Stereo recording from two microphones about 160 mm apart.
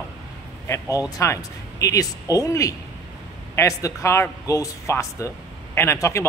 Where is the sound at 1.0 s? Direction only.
20° left (ahead or behind).